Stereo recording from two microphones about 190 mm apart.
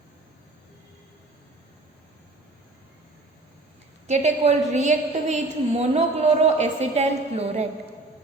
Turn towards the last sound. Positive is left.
turn(degrees=-35)  # may be behind; listen again after turning